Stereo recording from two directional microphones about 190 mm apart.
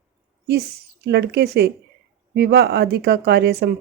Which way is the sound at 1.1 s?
60° right (ahead or behind).